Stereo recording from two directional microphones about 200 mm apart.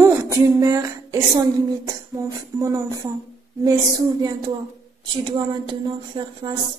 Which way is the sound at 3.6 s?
20° right (ahead or behind).